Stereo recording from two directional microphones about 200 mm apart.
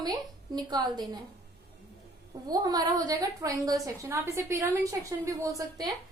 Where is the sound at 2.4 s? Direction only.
20° right (ahead or behind).